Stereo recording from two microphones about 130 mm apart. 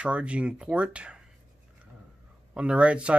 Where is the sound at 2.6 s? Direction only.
10° right (ahead or behind).